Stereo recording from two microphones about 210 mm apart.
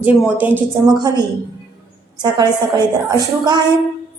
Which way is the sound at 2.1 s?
20° right (ahead or behind).